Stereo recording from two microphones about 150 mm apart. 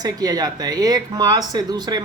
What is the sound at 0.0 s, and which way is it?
Speech, 25° right (ahead or behind).